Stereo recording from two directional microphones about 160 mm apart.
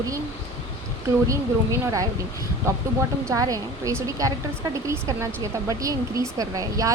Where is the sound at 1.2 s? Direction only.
20° right (ahead or behind).